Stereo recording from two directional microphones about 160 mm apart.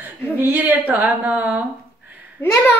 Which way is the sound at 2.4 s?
15° left (ahead or behind).